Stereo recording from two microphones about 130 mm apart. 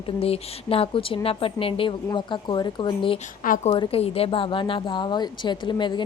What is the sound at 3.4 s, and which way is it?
Speech, 90° left.